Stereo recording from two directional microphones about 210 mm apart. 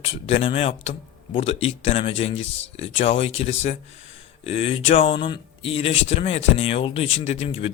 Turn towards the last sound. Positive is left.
turn(degrees=25)  # may be behind; listen again after turning